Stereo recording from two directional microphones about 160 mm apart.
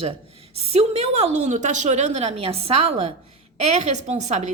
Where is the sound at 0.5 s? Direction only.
40° right (ahead or behind).